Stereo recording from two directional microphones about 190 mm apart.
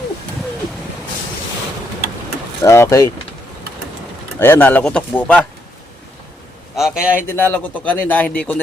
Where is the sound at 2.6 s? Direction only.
15° left (ahead or behind).